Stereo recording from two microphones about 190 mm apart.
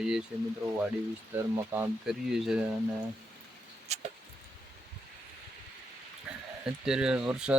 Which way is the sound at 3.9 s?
35° right (ahead or behind).